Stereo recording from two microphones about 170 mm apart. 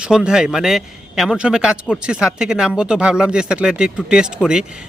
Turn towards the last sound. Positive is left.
turn(degrees=-5)  # may be behind; listen again after turning